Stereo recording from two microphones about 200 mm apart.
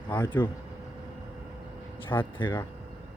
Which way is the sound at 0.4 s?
10° left (ahead or behind).